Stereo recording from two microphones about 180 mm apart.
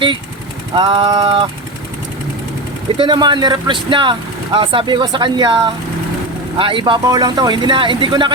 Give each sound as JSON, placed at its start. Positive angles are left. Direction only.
{"t": 0.8, "sound": "speech", "side_deg": -25}
{"t": 3.0, "sound": "speech", "side_deg": -25}